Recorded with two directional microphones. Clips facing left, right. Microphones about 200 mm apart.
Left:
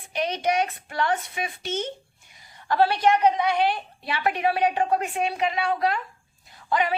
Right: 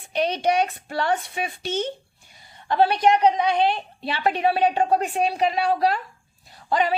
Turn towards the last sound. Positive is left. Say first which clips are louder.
# right 2 dB
turn(degrees=-35)  # may be behind; listen again after turning